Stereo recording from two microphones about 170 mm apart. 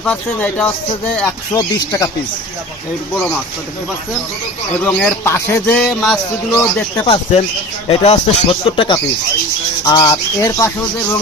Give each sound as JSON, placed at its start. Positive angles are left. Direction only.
{"t": 0.0, "sound": "speech", "side_deg": 10}
{"t": 1.5, "sound": "speech", "side_deg": 20}
{"t": 4.9, "sound": "speech", "side_deg": 10}
{"t": 7.0, "sound": "speech", "side_deg": 35}
{"t": 9.8, "sound": "speech", "side_deg": 20}